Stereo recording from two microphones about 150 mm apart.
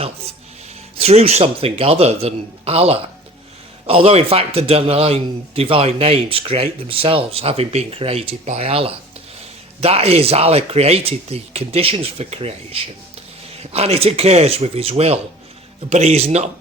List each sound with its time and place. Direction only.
0.9 s speech: 45° right (ahead or behind)